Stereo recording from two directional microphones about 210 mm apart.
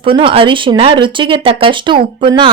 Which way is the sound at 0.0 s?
25° right (ahead or behind).